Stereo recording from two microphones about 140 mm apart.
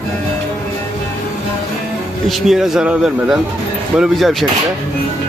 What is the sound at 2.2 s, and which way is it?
A man's voice, centre (ahead or behind).